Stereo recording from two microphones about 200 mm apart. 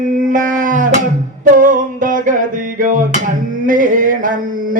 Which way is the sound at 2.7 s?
40° right (ahead or behind).